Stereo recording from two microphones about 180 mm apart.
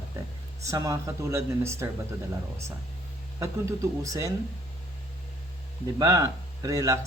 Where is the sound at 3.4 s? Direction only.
15° right (ahead or behind).